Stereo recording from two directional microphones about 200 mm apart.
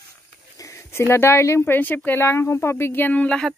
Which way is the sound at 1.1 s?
10° left (ahead or behind).